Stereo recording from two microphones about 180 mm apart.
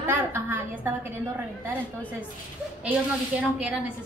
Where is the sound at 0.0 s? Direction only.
10° right (ahead or behind).